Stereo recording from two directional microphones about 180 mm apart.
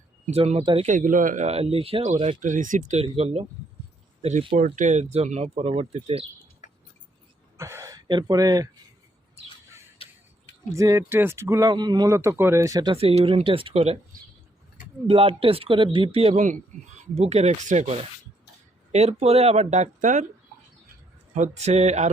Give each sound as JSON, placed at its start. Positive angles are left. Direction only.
{"t": 0.3, "sound": "speech", "side_deg": -35}
{"t": 0.9, "sound": "speech", "side_deg": -45}
{"t": 2.4, "sound": "speech", "side_deg": -45}
{"t": 6.6, "sound": "a sound", "side_deg": 45}
{"t": 7.5, "sound": "speech", "side_deg": -15}
{"t": 10.7, "sound": "speech", "side_deg": -15}
{"t": 15.0, "sound": "speech", "side_deg": -30}
{"t": 21.3, "sound": "speech", "side_deg": -40}